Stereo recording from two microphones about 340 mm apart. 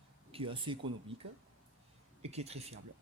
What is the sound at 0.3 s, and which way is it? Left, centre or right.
Speech, centre.